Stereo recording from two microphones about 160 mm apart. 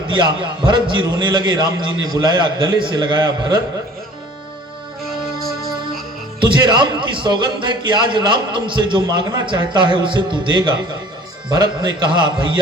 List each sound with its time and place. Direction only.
0.2 s a man's voice: 30° right (ahead or behind)
6.4 s a man's voice: 30° right (ahead or behind)